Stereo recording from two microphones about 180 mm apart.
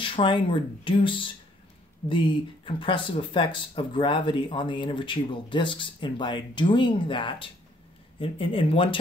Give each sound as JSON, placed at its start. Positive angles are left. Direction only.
{"t": 0.0, "sound": "speech", "side_deg": 25}